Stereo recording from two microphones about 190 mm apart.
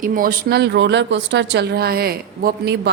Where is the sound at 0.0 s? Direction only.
45° right (ahead or behind).